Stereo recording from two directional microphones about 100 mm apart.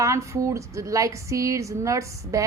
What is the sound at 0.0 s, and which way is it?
Speech, 30° right (ahead or behind).